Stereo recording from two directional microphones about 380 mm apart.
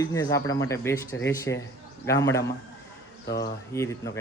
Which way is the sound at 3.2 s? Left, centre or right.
Left.